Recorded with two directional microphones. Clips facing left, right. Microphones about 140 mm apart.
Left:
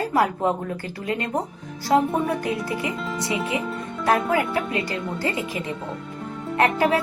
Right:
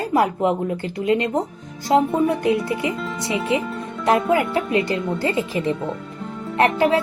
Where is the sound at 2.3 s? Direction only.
25° right (ahead or behind).